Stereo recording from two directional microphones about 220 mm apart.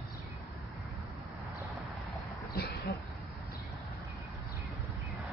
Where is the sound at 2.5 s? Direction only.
45° left (ahead or behind).